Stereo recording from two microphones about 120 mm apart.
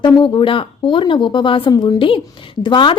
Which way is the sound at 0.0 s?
40° left (ahead or behind).